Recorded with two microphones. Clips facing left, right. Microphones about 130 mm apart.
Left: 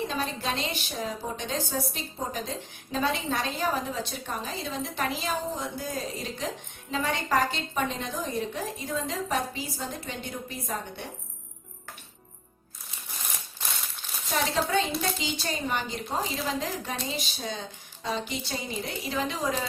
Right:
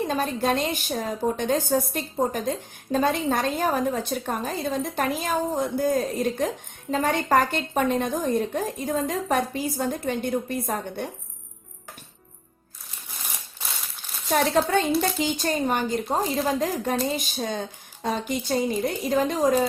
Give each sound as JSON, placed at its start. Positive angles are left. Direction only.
{"t": 0.1, "sound": "a woman's voice", "side_deg": -50}
{"t": 14.3, "sound": "a woman's voice", "side_deg": -50}